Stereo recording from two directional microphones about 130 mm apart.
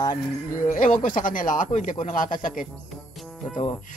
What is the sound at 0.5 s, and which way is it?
Speech, 90° left.